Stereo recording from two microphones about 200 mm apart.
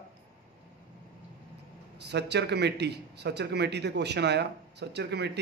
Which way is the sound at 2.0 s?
60° right (ahead or behind).